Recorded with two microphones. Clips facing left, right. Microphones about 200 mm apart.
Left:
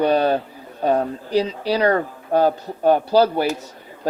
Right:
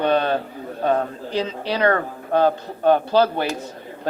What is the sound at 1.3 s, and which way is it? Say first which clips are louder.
Speech: left 4 dB; 40° left (ahead or behind).